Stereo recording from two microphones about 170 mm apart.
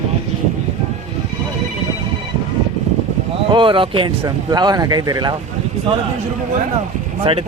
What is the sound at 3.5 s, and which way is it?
Speech, 30° right (ahead or behind).